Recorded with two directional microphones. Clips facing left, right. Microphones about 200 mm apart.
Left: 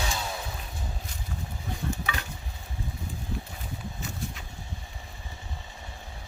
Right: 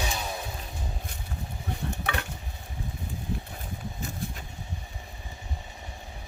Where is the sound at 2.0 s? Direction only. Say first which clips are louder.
Right 3 dB; 65° right (ahead or behind).